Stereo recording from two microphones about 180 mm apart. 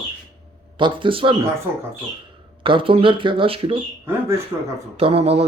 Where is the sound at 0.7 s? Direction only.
25° right (ahead or behind).